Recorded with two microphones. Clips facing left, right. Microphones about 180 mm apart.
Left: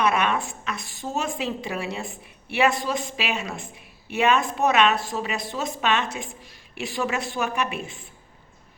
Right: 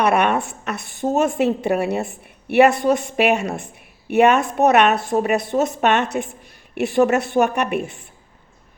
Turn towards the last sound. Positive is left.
turn(degrees=-65)  # may be behind; listen again after turning